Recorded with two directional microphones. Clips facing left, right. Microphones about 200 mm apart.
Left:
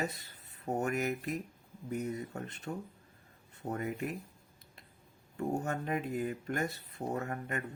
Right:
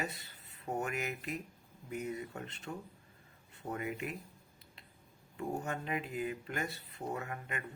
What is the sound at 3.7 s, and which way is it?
Speech, 40° left (ahead or behind).